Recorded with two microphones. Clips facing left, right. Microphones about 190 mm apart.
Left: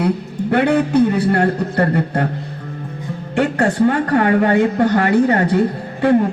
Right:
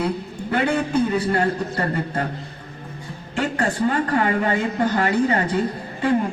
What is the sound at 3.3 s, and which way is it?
A woman's voice, 65° left (ahead or behind).